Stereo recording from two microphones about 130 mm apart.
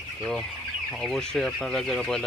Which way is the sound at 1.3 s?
5° left (ahead or behind).